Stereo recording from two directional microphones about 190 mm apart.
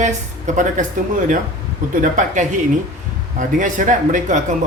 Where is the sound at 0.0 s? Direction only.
40° right (ahead or behind).